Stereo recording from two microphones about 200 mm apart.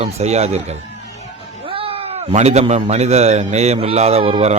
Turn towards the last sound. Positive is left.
turn(degrees=-30)  # may be behind; listen again after turning